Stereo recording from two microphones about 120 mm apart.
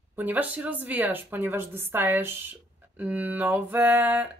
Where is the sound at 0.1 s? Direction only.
15° right (ahead or behind).